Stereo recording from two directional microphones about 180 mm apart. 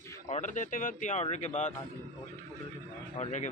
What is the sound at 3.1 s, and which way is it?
Speech, 40° left (ahead or behind).